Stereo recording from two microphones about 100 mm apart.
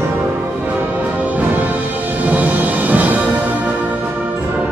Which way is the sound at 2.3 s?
15° right (ahead or behind).